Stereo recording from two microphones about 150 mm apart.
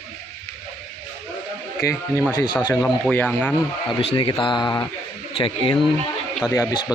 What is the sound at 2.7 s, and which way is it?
Speech, 15° left (ahead or behind).